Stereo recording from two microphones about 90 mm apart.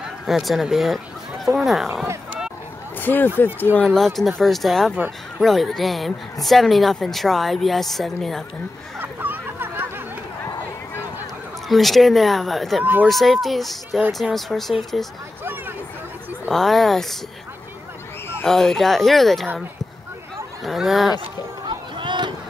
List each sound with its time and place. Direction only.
0.3 s speech: centre (ahead or behind)
3.0 s speech: 20° left (ahead or behind)
3.8 s speech: 5° left (ahead or behind)
9.0 s a sound: 20° right (ahead or behind)
11.7 s speech: centre (ahead or behind)
16.4 s speech: 5° left (ahead or behind)
18.4 s speech: 5° left (ahead or behind)
20.6 s speech: centre (ahead or behind)
21.6 s a sound: 60° right (ahead or behind)